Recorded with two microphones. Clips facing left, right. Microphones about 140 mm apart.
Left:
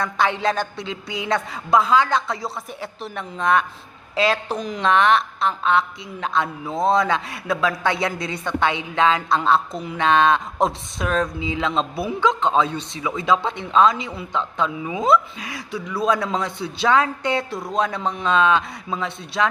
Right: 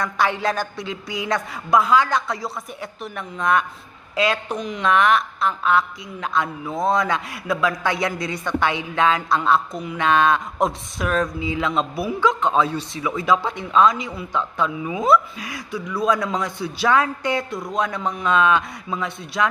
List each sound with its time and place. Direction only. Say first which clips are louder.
0.0 s a man's voice: left 1 dB; 25° left (ahead or behind)